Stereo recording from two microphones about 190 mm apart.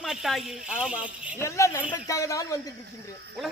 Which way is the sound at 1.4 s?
15° left (ahead or behind).